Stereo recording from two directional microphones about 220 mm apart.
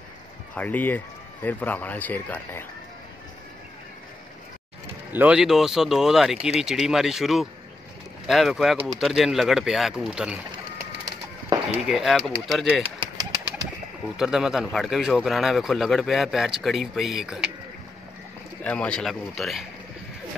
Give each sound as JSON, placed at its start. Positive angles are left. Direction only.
{"t": 0.6, "sound": "a man's voice", "side_deg": 5}
{"t": 5.1, "sound": "speech", "side_deg": -5}
{"t": 11.8, "sound": "speech", "side_deg": 0}
{"t": 12.8, "sound": "bird", "side_deg": -20}
{"t": 14.1, "sound": "speech", "side_deg": -5}
{"t": 18.6, "sound": "speech", "side_deg": 5}